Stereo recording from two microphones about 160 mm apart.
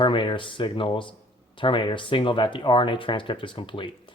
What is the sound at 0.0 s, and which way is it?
Speech, 30° left (ahead or behind).